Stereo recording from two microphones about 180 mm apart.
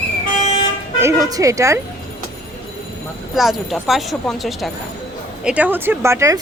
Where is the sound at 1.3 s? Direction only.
20° right (ahead or behind).